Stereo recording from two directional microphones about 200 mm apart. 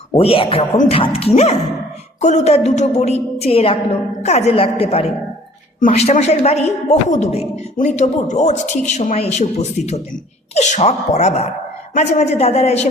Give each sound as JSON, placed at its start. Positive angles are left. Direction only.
{"t": 0.1, "sound": "a woman's voice", "side_deg": 25}